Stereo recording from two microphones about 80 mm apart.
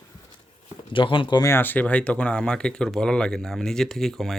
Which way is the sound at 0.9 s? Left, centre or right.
Left.